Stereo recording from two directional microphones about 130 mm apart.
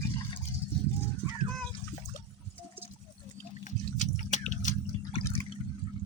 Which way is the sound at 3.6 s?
70° left (ahead or behind).